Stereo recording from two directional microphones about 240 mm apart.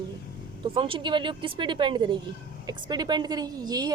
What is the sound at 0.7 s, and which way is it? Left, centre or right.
Speech, right.